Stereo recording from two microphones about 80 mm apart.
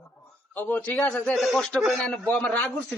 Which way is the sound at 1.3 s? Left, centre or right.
Centre.